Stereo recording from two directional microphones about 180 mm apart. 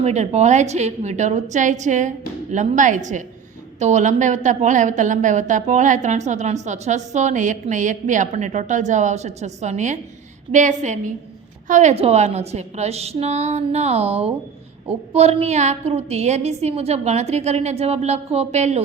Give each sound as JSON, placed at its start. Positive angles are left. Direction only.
{"t": 0.0, "sound": "a woman's voice", "side_deg": -35}